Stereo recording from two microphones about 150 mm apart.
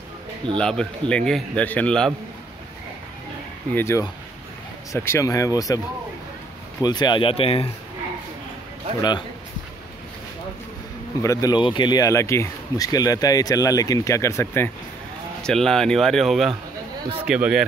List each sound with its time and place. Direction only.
0.6 s a man's voice: 5° left (ahead or behind)
3.7 s speech: 20° left (ahead or behind)
6.8 s speech: 30° left (ahead or behind)
11.2 s speech: 30° left (ahead or behind)
15.4 s speech: 5° left (ahead or behind)